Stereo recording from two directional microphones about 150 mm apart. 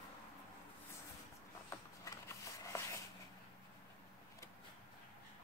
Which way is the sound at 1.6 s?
20° left (ahead or behind).